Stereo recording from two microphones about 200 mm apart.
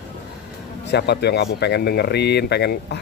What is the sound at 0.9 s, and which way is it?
Speech, 55° left (ahead or behind).